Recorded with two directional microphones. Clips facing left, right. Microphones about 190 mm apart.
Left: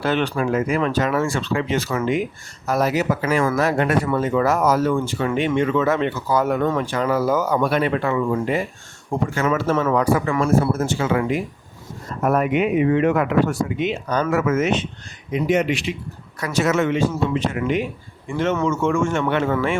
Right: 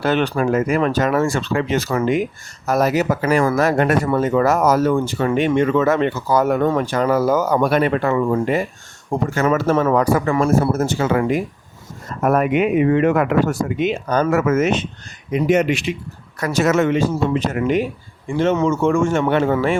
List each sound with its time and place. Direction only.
0.0 s speech: 45° right (ahead or behind)